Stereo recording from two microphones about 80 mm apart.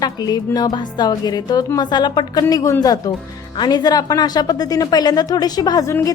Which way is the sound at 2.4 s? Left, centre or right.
Left.